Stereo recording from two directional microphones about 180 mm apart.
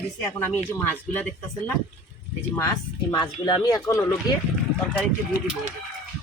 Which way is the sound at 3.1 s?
20° left (ahead or behind).